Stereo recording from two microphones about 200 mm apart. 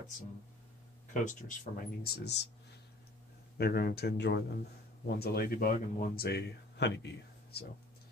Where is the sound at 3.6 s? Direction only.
50° left (ahead or behind).